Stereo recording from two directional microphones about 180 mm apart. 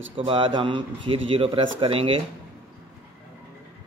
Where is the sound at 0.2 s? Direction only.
30° right (ahead or behind).